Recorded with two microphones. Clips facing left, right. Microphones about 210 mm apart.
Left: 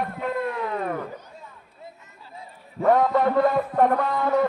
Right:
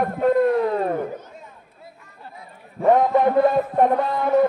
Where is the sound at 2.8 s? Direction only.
20° right (ahead or behind).